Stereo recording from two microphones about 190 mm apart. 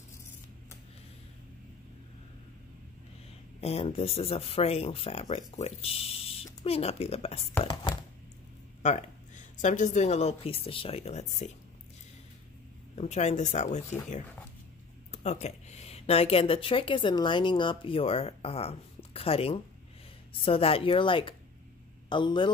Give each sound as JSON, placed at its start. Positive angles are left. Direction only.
{"t": 3.6, "sound": "speech", "side_deg": 30}
{"t": 7.6, "sound": "chopping", "side_deg": 25}
{"t": 8.8, "sound": "a woman's voice", "side_deg": 40}
{"t": 12.9, "sound": "speech", "side_deg": 35}
{"t": 15.0, "sound": "speech", "side_deg": 35}